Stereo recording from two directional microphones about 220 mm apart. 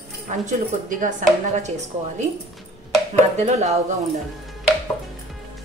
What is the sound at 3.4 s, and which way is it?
Speech, 30° right (ahead or behind).